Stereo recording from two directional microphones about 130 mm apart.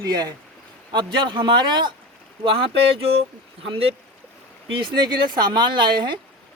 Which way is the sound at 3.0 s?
45° right (ahead or behind).